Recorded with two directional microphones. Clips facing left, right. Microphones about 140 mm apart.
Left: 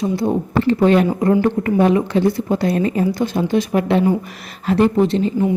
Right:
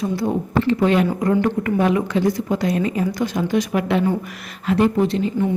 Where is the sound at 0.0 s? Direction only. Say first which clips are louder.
Left 3 dB; 20° left (ahead or behind).